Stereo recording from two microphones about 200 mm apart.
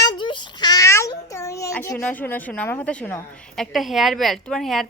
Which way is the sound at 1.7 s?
5° left (ahead or behind).